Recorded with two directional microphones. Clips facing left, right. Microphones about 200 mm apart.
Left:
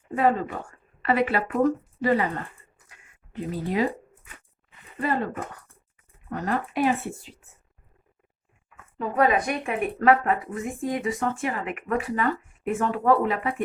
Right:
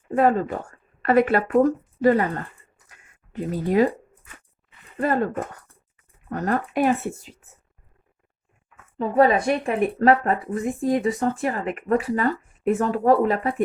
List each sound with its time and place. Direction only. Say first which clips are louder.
0.1 s a woman's voice: right 3 dB; 45° right (ahead or behind)
3.3 s speech: right 6 dB; 45° right (ahead or behind)
4.9 s speech: right 4 dB; 45° right (ahead or behind)
6.3 s speech: right 3 dB; 45° right (ahead or behind)
9.0 s speech: right 4 dB; 30° right (ahead or behind)